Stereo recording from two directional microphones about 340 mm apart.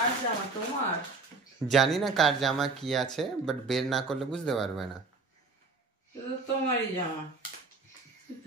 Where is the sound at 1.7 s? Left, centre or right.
Centre.